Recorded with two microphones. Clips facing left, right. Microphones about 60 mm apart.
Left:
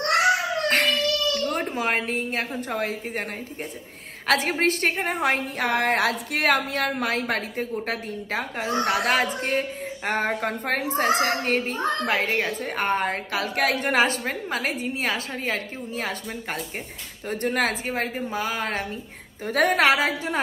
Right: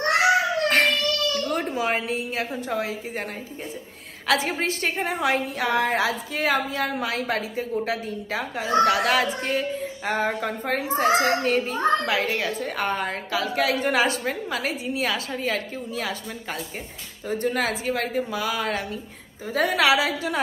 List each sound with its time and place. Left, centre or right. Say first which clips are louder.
0.7 s a sound: even; left
1.5 s a woman's voice: right 1 dB; left
4.3 s a woman's voice: left 2 dB; left
17.3 s a woman's voice: even; left
19.4 s a woman's voice: left 2 dB; left
19.7 s a woman's voice: right 1 dB; left